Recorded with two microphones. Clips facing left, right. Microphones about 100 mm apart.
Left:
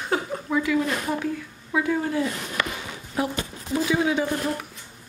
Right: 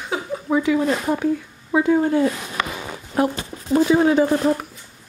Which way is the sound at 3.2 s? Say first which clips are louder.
Right 6 dB; 50° right (ahead or behind).